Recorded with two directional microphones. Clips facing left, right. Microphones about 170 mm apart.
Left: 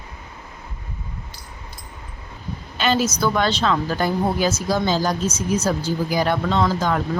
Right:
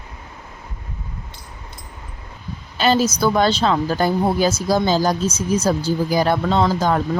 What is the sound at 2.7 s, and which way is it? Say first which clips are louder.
A woman's voice: right 3 dB; 35° right (ahead or behind).